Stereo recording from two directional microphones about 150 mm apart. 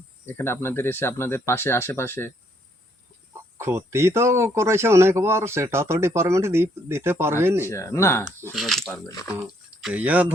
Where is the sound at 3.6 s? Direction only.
15° right (ahead or behind).